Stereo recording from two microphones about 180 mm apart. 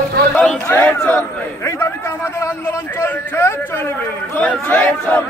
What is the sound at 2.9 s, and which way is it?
A man's voice, 15° left (ahead or behind).